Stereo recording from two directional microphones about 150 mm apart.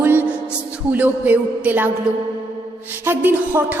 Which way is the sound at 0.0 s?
15° right (ahead or behind).